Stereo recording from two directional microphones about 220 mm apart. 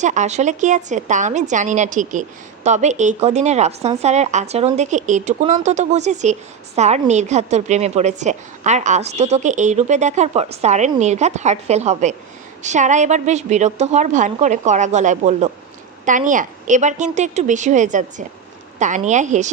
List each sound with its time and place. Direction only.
0.0 s a woman's voice: 35° right (ahead or behind)